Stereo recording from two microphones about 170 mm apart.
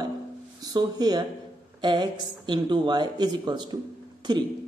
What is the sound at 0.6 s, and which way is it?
Speech, 25° right (ahead or behind).